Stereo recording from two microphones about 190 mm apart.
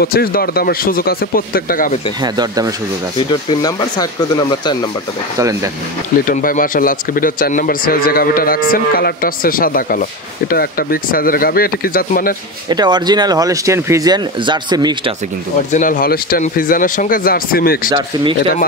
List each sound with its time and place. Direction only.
0.0 s speech: 55° left (ahead or behind)
2.2 s speech: 20° right (ahead or behind)
3.3 s speech: 25° left (ahead or behind)
5.4 s speech: 15° right (ahead or behind)
6.2 s speech: 45° left (ahead or behind)
12.6 s speech: 20° right (ahead or behind)
15.7 s speech: 45° left (ahead or behind)